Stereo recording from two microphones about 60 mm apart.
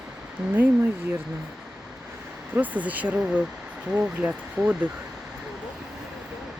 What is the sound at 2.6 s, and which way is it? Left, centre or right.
Speech, right.